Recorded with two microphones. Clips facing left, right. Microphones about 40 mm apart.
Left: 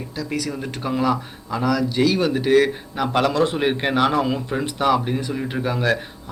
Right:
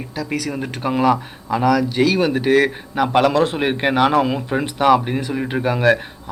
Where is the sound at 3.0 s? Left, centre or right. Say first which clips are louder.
Right 4 dB; centre.